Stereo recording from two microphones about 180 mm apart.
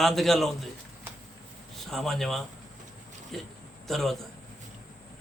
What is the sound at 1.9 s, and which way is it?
A man's voice, centre (ahead or behind).